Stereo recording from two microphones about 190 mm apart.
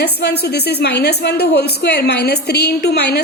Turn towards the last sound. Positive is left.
turn(degrees=60)  # may be behind; listen again after turning